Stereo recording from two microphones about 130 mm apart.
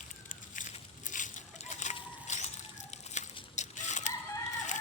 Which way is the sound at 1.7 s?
65° left (ahead or behind).